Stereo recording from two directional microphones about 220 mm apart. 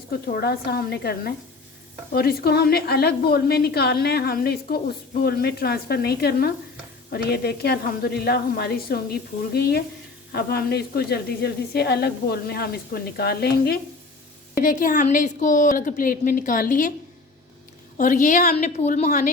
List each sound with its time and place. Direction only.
0.1 s a woman's voice: 45° left (ahead or behind)
17.9 s a woman's voice: 35° left (ahead or behind)